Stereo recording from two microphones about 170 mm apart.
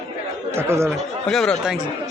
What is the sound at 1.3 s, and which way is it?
Speech, 5° left (ahead or behind).